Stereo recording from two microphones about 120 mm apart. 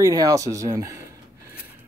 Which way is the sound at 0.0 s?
30° right (ahead or behind).